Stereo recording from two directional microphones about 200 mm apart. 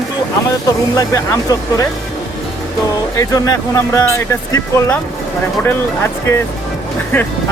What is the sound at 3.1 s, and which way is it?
Speech, 15° left (ahead or behind).